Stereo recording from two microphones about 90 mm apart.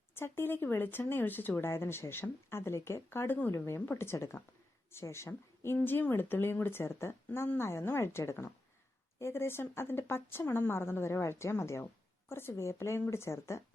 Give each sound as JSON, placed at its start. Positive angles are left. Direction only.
{"t": 0.1, "sound": "speech", "side_deg": 25}